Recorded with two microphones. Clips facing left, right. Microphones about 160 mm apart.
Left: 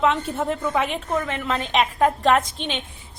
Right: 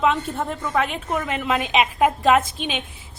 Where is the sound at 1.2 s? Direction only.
10° right (ahead or behind).